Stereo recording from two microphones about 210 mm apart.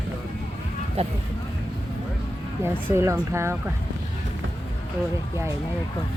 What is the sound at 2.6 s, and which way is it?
Speech, 10° right (ahead or behind).